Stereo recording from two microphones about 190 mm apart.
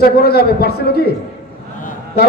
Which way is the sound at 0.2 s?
55° left (ahead or behind).